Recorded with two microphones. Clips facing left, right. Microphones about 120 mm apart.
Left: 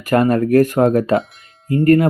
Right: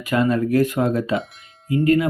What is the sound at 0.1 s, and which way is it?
Speech, 55° left (ahead or behind).